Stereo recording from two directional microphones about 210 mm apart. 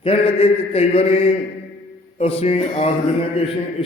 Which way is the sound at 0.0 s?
25° left (ahead or behind).